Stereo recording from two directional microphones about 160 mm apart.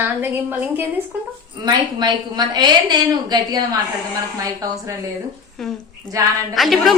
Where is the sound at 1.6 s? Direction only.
25° right (ahead or behind).